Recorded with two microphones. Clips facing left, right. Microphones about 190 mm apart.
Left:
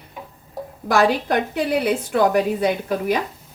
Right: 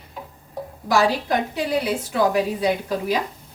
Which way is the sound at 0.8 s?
55° left (ahead or behind).